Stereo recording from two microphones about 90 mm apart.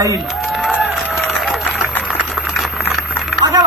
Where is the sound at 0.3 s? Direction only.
5° right (ahead or behind).